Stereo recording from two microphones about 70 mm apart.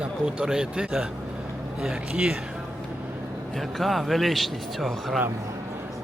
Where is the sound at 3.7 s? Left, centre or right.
Centre.